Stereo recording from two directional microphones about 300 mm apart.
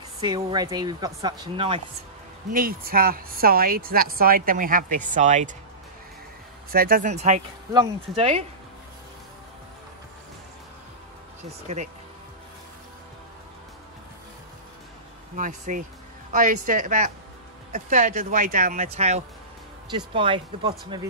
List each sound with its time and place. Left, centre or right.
0.2 s speech: centre
2.5 s a woman's voice: right
6.7 s a woman's voice: right
11.6 s a woman's voice: right
15.3 s a woman's voice: right